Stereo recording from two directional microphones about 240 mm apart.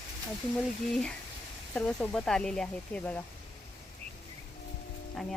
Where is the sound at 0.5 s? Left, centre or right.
Centre.